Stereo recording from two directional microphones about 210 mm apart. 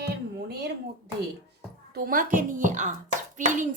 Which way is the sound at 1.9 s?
45° right (ahead or behind).